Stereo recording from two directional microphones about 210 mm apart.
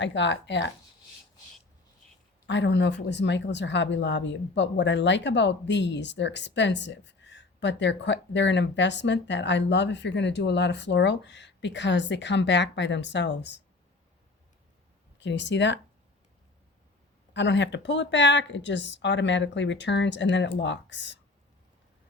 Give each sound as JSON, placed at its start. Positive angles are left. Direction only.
{"t": 0.0, "sound": "speech", "side_deg": 60}
{"t": 2.5, "sound": "speech", "side_deg": 55}
{"t": 15.2, "sound": "speech", "side_deg": 60}
{"t": 17.3, "sound": "speech", "side_deg": 55}